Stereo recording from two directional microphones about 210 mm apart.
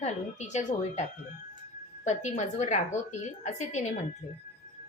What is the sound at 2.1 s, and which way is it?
Speech, 35° left (ahead or behind).